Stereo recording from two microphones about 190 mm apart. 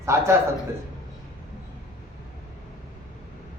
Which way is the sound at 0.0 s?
15° right (ahead or behind).